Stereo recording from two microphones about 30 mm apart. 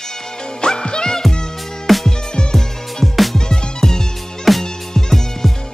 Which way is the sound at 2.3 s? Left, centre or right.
Left.